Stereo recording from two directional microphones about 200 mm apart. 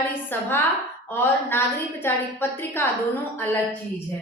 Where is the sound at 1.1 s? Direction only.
10° left (ahead or behind).